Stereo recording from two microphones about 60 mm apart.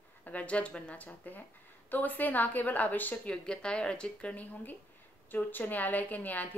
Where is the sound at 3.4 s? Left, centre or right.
Centre.